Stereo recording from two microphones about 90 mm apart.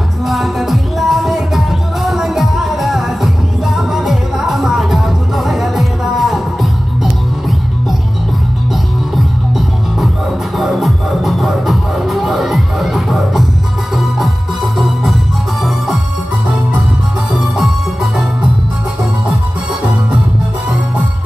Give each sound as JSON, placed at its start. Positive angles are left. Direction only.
{"t": 0.3, "sound": "music", "side_deg": 0}
{"t": 9.1, "sound": "music", "side_deg": 0}